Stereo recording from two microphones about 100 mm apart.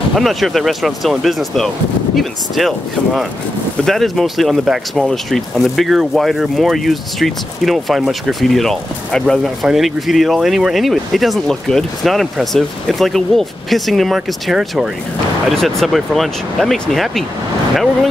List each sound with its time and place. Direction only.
0.1 s speech: centre (ahead or behind)